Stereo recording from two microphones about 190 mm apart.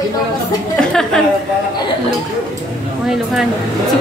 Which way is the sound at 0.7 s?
5° left (ahead or behind).